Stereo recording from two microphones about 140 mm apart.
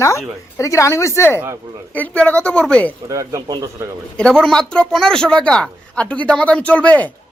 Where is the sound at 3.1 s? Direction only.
25° right (ahead or behind).